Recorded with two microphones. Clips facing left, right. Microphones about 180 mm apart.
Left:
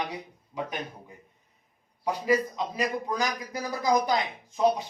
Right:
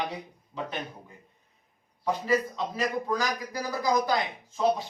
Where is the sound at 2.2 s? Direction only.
15° left (ahead or behind).